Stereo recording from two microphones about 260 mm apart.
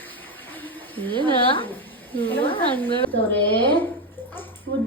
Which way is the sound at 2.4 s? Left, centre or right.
Left.